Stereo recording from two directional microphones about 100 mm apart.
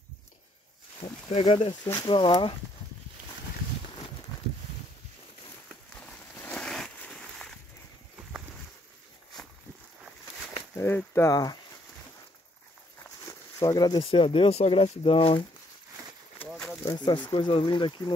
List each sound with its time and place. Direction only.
1.3 s speech: 70° left (ahead or behind)
2.0 s speech: 60° left (ahead or behind)
6.3 s a sound: 15° left (ahead or behind)
10.7 s a sound: 25° left (ahead or behind)
11.1 s speech: 35° left (ahead or behind)
13.2 s a sound: 40° left (ahead or behind)
14.1 s speech: 65° left (ahead or behind)
16.8 s speech: 50° left (ahead or behind)
17.3 s speech: 60° left (ahead or behind)